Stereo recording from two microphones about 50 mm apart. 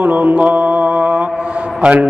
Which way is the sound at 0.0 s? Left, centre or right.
Right.